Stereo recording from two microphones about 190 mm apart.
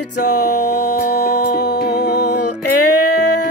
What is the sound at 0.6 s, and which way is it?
Music, 60° left (ahead or behind).